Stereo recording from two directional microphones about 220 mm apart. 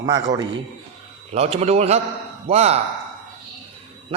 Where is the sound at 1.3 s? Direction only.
30° right (ahead or behind).